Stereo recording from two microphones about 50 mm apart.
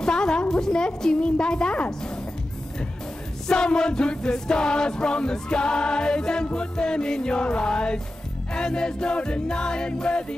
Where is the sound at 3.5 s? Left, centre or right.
Centre.